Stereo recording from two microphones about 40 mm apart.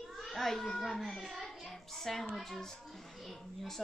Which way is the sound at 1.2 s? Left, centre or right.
Centre.